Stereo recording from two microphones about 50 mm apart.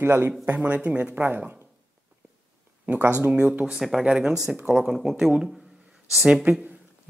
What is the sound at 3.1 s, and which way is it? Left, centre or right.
Speech, right.